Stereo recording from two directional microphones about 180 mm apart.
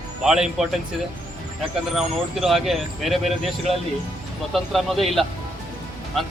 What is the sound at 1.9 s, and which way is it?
Speech, centre (ahead or behind).